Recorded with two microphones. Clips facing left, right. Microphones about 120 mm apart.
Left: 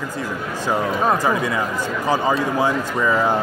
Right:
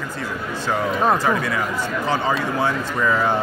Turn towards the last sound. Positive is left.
turn(degrees=10)  # may be behind; listen again after turning